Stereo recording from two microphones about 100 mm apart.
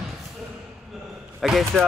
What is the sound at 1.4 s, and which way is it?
Speech, centre (ahead or behind).